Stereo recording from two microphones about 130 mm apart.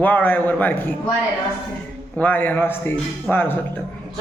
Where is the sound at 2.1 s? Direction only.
15° left (ahead or behind).